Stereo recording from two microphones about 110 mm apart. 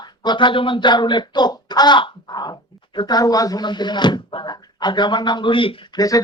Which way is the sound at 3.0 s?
40° left (ahead or behind).